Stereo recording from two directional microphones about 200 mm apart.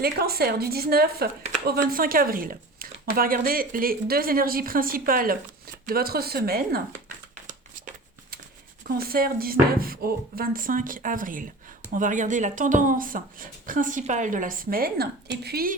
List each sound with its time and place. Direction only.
0.0 s speech: 50° right (ahead or behind)
8.9 s speech: 50° right (ahead or behind)